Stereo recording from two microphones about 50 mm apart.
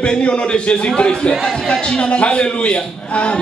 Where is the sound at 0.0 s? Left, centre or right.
Left.